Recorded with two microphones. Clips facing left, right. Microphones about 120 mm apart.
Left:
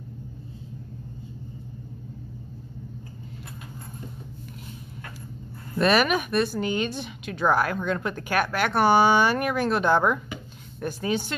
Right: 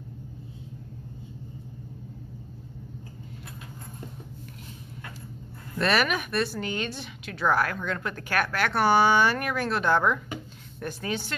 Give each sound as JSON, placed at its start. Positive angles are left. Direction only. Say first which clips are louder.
{"t": 5.8, "sound": "a woman's voice", "louder": "left 4 dB", "side_deg": 15}